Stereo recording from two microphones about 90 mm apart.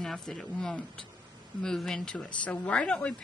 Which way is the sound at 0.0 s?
5° left (ahead or behind).